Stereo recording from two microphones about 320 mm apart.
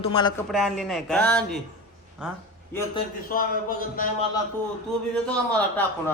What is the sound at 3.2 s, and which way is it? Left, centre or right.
Speech, left.